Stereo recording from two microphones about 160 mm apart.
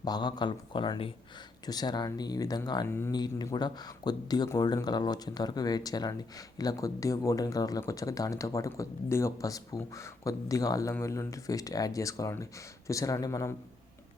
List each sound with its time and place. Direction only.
0.0 s speech: 25° left (ahead or behind)